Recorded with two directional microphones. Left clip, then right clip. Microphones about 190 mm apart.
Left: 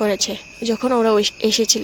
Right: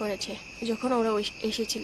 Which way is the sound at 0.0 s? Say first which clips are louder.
Left 12 dB; 40° left (ahead or behind).